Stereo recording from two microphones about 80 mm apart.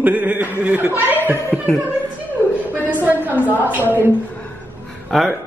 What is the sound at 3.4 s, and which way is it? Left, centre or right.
Speech, left.